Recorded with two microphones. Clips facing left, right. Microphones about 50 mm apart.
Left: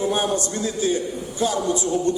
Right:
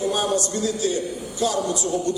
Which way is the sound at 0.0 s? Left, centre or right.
Left.